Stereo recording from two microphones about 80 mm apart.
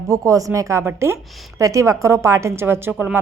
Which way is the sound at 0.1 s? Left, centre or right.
Right.